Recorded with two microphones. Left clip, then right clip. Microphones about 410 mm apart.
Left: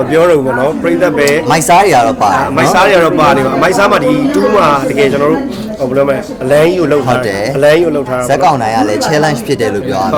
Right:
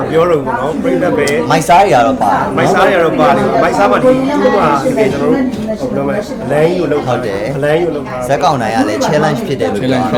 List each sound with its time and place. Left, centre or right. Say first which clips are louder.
1.2 s speech: left 2 dB; left